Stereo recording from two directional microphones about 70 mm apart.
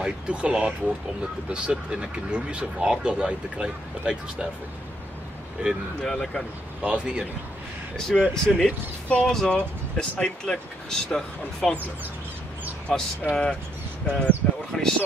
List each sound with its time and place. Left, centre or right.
0.0 s speech: centre
5.6 s speech: centre
5.9 s speech: centre
6.8 s speech: centre
8.1 s speech: centre
13.3 s speech: centre